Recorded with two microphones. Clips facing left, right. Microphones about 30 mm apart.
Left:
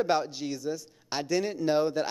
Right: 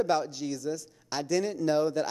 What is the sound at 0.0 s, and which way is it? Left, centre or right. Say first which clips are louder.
A man's voice: even; left.